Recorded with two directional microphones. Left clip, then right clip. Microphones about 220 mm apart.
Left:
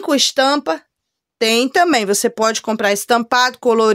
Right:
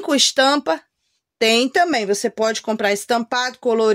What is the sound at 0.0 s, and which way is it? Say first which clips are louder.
Speech: left 1 dB; 15° left (ahead or behind).